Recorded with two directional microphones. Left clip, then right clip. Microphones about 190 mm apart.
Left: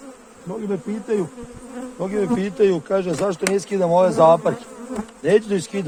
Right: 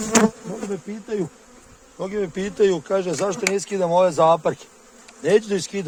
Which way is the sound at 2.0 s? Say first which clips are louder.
Left 3 dB; 25° right (ahead or behind).